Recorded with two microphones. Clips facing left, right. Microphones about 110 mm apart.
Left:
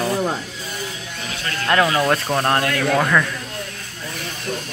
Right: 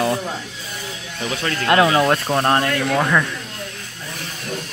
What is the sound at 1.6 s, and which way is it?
Speech, 20° right (ahead or behind).